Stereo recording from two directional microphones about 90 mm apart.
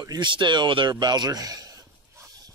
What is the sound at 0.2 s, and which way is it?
Speech, 60° right (ahead or behind).